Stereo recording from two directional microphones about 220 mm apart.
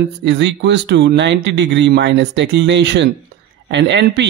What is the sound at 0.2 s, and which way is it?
Speech, 55° right (ahead or behind).